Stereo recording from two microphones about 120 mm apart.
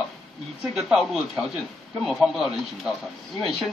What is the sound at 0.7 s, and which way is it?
Speech, centre (ahead or behind).